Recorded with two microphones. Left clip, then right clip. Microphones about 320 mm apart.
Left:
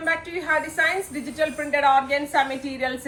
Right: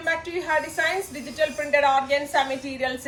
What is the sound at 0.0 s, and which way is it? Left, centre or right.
A woman's voice, centre.